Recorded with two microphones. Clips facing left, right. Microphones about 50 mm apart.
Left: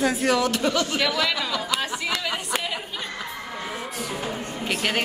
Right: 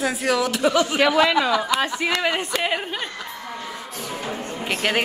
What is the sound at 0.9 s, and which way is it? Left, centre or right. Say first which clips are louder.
Speech: right 7 dB; right.